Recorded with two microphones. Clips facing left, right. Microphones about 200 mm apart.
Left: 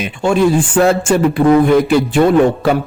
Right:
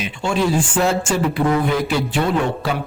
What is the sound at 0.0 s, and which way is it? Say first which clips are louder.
A man's voice: left 7 dB; 50° left (ahead or behind).